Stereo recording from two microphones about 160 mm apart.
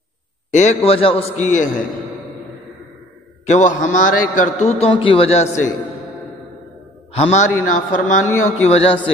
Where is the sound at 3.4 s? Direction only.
50° left (ahead or behind).